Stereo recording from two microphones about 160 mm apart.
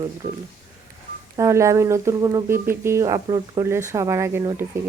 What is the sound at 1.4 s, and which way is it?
Speech, 20° right (ahead or behind).